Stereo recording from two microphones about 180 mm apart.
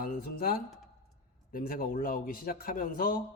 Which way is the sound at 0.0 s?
55° left (ahead or behind).